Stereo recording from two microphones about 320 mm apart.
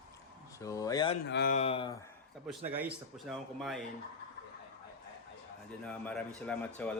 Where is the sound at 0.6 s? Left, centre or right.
Centre.